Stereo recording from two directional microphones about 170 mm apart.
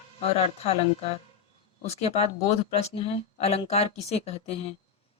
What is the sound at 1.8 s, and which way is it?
Speech, 40° left (ahead or behind).